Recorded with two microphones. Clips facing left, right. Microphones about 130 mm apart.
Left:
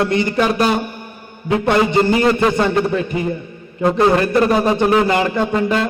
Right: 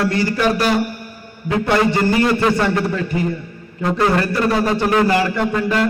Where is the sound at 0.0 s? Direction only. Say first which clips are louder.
Left 1 dB; 20° left (ahead or behind).